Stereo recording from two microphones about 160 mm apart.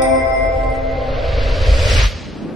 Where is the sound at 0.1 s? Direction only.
Centre (ahead or behind).